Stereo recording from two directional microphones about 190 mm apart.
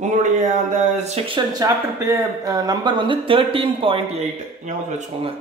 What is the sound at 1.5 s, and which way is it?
A woman's voice, 15° right (ahead or behind).